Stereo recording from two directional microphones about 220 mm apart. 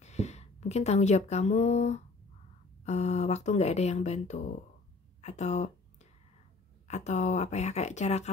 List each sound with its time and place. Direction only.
0.0 s speech: 30° left (ahead or behind)
5.2 s a sound: 30° left (ahead or behind)
6.9 s speech: 30° left (ahead or behind)